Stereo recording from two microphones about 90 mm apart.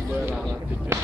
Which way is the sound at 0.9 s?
30° right (ahead or behind).